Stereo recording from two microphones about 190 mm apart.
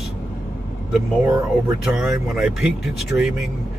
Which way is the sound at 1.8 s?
Centre (ahead or behind).